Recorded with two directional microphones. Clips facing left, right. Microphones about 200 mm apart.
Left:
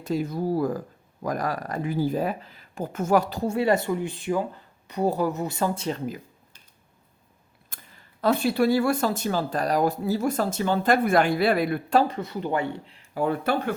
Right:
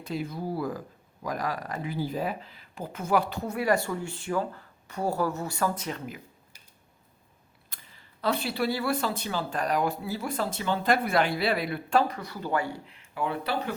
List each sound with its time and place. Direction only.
0.1 s speech: 45° left (ahead or behind)
7.7 s a sound: 50° left (ahead or behind)
8.2 s speech: 50° left (ahead or behind)
12.0 s speech: 25° left (ahead or behind); by 13.7 s 50° left (ahead or behind)